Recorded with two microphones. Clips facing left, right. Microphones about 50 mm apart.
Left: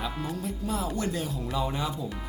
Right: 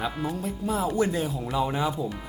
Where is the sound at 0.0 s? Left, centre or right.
Centre.